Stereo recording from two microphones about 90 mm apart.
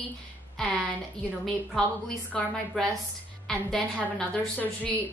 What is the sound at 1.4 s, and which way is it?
A woman's voice, 5° left (ahead or behind).